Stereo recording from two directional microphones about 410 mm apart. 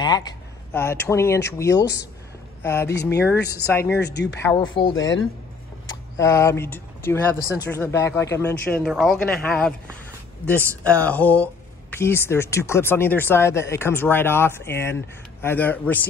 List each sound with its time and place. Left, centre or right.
0.0 s speech: centre
2.9 s speech: left
3.5 s speech: centre
4.0 s speech: left
4.4 s speech: centre
4.9 s speech: left
6.1 s speech: centre